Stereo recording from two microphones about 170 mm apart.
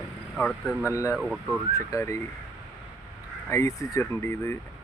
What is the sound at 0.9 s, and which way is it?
Speech, 20° left (ahead or behind).